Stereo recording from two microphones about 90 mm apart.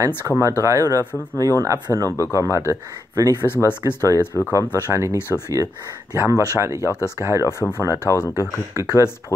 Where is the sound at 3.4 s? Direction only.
25° left (ahead or behind).